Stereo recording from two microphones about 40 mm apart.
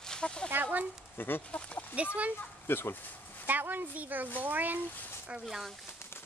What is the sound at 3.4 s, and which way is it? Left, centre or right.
A woman's voice, right.